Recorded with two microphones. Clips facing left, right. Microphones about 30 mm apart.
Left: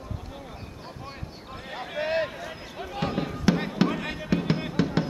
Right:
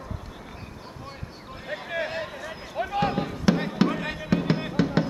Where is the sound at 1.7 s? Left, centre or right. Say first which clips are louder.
Left 2 dB; centre.